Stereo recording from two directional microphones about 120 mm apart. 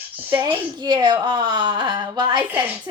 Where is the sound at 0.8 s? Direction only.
40° right (ahead or behind).